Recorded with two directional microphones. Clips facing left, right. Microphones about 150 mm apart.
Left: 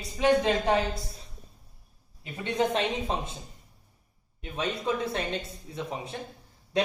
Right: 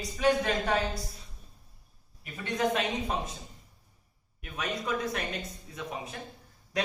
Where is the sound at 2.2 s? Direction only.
25° left (ahead or behind).